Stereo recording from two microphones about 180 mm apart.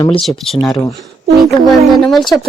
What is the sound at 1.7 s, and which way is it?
Speech, centre (ahead or behind).